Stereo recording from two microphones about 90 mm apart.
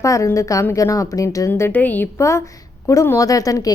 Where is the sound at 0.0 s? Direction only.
35° left (ahead or behind); by 2.0 s 20° left (ahead or behind).